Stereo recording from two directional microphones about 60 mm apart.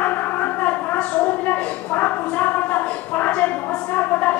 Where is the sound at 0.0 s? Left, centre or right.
Left.